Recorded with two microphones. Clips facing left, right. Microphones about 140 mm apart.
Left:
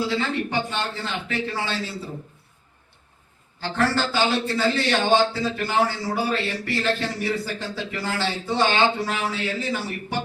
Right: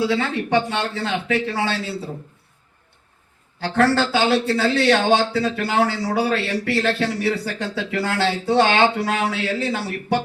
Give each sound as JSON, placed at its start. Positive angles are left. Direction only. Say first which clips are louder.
{"t": 0.0, "sound": "a man's voice", "louder": "right 3 dB", "side_deg": -75}
{"t": 3.8, "sound": "a man's voice", "louder": "right 4 dB", "side_deg": -70}